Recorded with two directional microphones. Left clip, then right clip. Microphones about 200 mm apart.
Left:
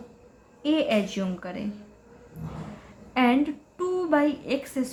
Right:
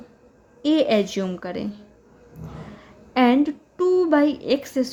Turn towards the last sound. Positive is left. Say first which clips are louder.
# right 6 dB
turn(degrees=-40)  # may be behind; listen again after turning